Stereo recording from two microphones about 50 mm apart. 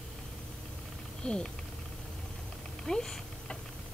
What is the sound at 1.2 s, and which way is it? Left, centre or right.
Speech, centre.